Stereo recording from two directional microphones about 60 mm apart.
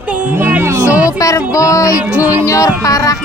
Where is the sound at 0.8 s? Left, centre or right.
Right.